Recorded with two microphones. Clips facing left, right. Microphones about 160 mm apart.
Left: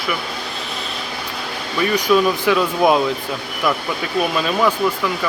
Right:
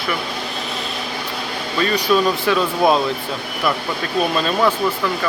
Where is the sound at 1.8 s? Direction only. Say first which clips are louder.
Left 1 dB; 15° left (ahead or behind).